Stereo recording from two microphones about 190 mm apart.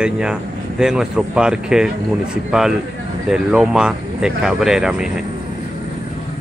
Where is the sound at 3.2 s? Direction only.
5° right (ahead or behind).